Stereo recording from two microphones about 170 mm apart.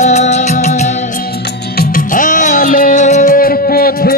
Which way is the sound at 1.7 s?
60° left (ahead or behind).